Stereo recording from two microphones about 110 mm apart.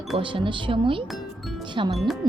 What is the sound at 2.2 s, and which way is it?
Music, 40° right (ahead or behind).